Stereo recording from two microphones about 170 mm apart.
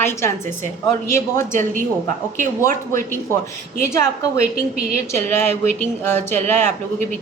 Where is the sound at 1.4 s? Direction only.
50° right (ahead or behind).